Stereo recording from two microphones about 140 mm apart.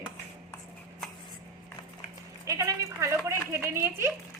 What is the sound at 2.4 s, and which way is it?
Speech, 20° right (ahead or behind).